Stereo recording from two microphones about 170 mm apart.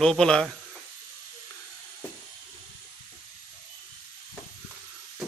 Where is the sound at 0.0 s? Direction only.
5° left (ahead or behind).